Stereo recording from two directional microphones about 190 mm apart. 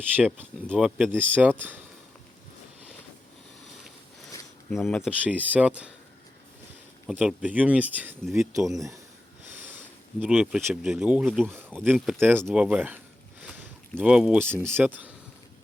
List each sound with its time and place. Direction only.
0.2 s speech: 10° right (ahead or behind)
4.7 s speech: centre (ahead or behind)
5.2 s speech: 10° right (ahead or behind)
7.1 s speech: 5° right (ahead or behind)
9.5 s sniff: 10° right (ahead or behind)
10.2 s speech: 5° right (ahead or behind)